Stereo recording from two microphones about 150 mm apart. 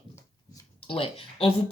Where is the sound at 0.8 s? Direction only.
35° left (ahead or behind).